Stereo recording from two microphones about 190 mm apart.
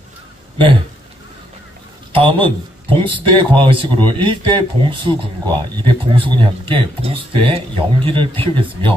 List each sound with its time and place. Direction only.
2.1 s a man's voice: 25° right (ahead or behind)